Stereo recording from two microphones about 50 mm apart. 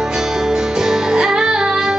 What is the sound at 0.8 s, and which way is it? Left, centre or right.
Music, centre.